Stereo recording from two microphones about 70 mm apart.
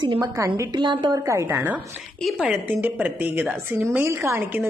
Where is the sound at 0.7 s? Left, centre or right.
Right.